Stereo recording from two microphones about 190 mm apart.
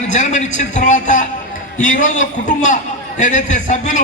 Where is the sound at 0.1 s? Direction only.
40° left (ahead or behind).